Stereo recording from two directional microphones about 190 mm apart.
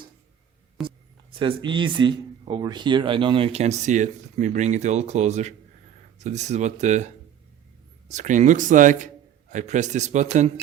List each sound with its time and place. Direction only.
0.8 s speech: 25° right (ahead or behind)